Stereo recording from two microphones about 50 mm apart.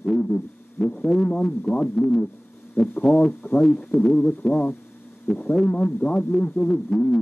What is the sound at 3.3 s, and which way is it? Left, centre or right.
Speech, left.